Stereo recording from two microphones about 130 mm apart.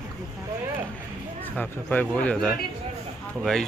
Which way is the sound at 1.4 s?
10° left (ahead or behind).